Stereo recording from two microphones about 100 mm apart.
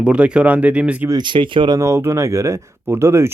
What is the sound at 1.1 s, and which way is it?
Speech, 55° right (ahead or behind).